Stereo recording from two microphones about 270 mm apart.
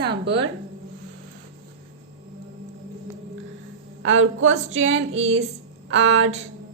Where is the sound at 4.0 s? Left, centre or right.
Right.